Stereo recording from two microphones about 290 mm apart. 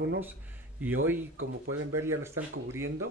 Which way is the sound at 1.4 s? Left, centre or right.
Right.